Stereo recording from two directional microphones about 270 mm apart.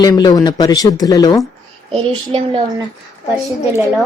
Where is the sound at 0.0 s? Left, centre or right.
Centre.